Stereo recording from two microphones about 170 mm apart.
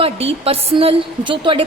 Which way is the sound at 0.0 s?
35° right (ahead or behind).